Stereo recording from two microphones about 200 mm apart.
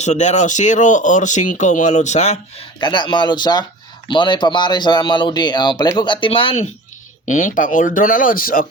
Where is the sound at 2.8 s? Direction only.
20° left (ahead or behind).